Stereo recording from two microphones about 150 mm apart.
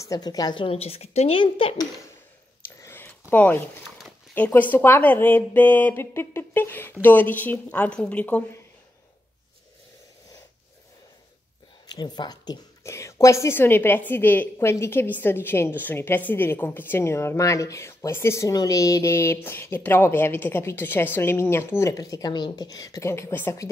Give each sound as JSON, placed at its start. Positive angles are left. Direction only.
{"t": 0.0, "sound": "a woman's voice", "side_deg": 25}
{"t": 2.8, "sound": "a sound", "side_deg": 15}
{"t": 4.5, "sound": "a woman's voice", "side_deg": 10}
{"t": 11.9, "sound": "a woman's voice", "side_deg": 30}